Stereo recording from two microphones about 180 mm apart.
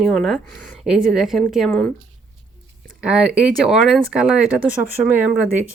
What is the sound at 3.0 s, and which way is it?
Speech, 5° right (ahead or behind).